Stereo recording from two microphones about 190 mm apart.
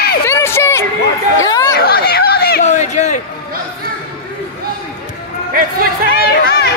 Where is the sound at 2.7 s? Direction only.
40° left (ahead or behind).